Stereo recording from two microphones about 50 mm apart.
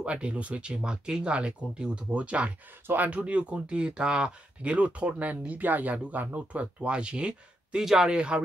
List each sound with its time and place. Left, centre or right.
0.0 s speech: right
7.8 s speech: centre
8.1 s speech: right